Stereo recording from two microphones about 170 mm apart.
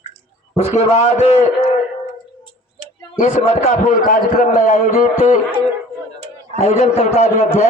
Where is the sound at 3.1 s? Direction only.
45° left (ahead or behind).